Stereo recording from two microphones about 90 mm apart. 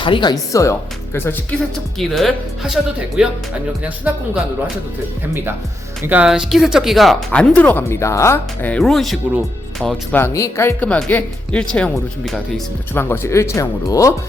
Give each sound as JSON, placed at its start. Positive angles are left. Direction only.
{"t": 0.0, "sound": "speech", "side_deg": 60}
{"t": 0.5, "sound": "speech", "side_deg": 35}
{"t": 1.7, "sound": "speech", "side_deg": 0}
{"t": 3.2, "sound": "speech", "side_deg": -10}
{"t": 6.2, "sound": "speech", "side_deg": -5}
{"t": 7.9, "sound": "speech", "side_deg": 35}
{"t": 8.8, "sound": "speech", "side_deg": 0}
{"t": 10.1, "sound": "speech", "side_deg": 25}
{"t": 10.8, "sound": "speech", "side_deg": 15}
{"t": 12.9, "sound": "speech", "side_deg": 25}